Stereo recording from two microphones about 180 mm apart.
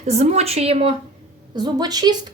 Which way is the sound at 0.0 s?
40° right (ahead or behind).